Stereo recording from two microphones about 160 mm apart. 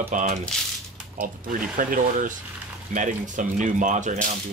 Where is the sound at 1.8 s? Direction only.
55° right (ahead or behind).